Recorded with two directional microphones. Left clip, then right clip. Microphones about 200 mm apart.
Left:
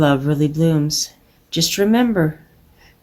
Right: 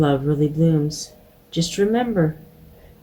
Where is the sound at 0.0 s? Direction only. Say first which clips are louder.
Left 3 dB; 55° left (ahead or behind).